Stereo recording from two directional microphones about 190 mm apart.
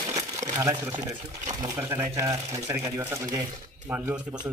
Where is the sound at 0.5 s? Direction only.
20° right (ahead or behind).